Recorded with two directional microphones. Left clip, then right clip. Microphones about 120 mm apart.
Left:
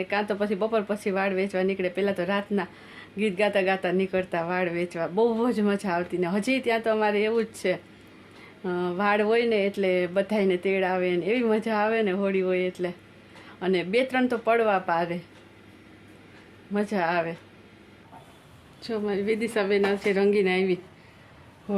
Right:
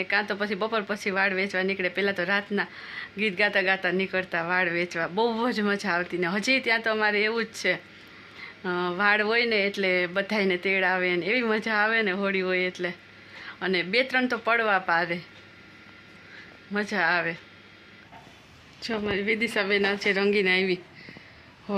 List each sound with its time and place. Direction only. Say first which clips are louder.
0.0 s speech: even; 15° left (ahead or behind)
16.7 s speech: right 1 dB; 15° left (ahead or behind)
18.8 s speech: even; 5° left (ahead or behind)